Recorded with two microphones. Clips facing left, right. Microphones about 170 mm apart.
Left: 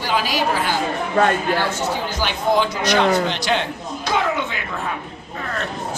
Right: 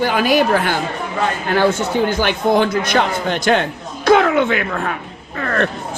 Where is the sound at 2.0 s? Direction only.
55° right (ahead or behind).